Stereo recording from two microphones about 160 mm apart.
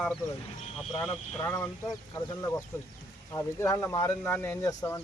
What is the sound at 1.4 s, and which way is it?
Speech, 15° left (ahead or behind).